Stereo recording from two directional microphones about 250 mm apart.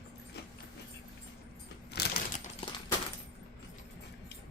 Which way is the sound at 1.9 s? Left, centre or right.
Left.